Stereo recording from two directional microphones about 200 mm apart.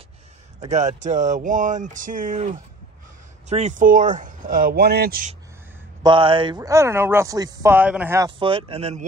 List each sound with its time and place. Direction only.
0.7 s speech: 35° right (ahead or behind)
6.0 s speech: 25° right (ahead or behind)
8.4 s speech: 25° right (ahead or behind)